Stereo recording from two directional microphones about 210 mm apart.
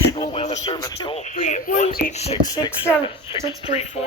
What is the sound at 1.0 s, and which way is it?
Speech, 30° left (ahead or behind).